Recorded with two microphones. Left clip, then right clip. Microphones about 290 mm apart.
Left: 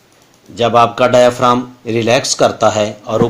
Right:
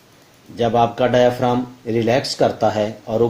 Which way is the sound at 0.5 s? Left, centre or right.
Left.